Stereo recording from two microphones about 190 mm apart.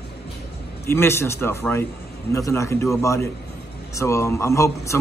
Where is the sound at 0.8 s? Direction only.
15° left (ahead or behind).